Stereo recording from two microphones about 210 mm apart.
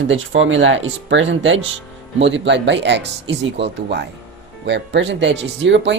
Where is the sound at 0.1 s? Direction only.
65° right (ahead or behind).